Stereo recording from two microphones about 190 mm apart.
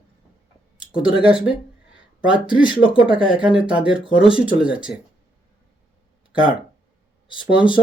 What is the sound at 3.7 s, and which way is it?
Speech, 5° right (ahead or behind).